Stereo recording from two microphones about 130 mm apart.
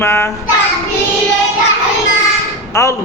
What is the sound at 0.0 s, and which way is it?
Speech, 20° left (ahead or behind).